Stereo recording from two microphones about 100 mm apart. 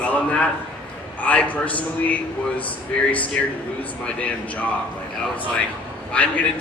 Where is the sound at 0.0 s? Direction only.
15° left (ahead or behind).